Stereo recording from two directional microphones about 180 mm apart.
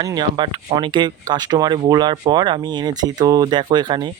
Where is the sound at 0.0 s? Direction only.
20° right (ahead or behind).